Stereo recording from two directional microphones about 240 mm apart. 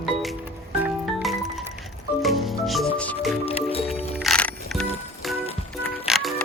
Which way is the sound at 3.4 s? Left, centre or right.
Left.